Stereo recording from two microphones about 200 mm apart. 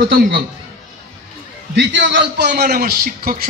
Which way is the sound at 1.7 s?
60° right (ahead or behind).